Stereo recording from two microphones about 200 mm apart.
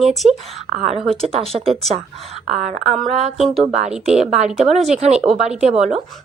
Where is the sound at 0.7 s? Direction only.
40° right (ahead or behind).